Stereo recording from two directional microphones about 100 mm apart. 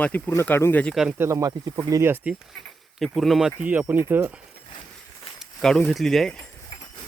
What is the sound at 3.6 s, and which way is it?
Speech, 15° right (ahead or behind).